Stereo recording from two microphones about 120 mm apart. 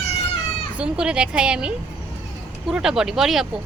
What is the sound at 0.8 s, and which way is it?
Speech, 10° right (ahead or behind).